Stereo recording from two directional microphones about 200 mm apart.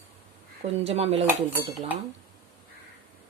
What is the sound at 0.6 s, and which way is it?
Speech, 30° right (ahead or behind).